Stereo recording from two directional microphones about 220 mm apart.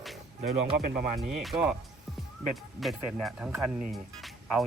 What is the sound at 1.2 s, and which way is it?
Speech, centre (ahead or behind).